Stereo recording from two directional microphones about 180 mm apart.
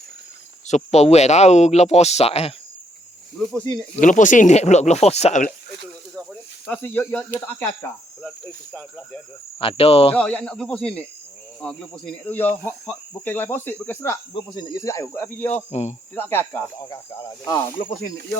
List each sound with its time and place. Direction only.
0.7 s speech: 35° left (ahead or behind)
4.0 s speech: 45° left (ahead or behind)
6.7 s speech: 10° left (ahead or behind)
9.6 s speech: 30° left (ahead or behind)
10.2 s speech: 5° left (ahead or behind)
15.5 s speech: 40° left (ahead or behind)
16.1 s speech: 10° left (ahead or behind)